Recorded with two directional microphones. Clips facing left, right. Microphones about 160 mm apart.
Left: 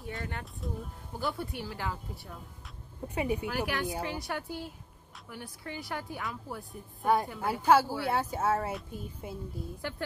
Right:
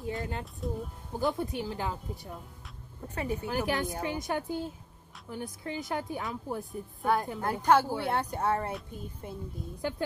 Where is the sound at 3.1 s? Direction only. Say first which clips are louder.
Left 1 dB; 10° left (ahead or behind).